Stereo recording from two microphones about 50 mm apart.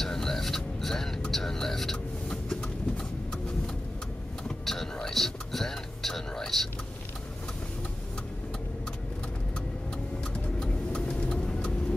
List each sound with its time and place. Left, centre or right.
0.0 s a sound: centre
4.5 s vehicle: centre
5.1 s whispering: centre
10.3 s vehicle: centre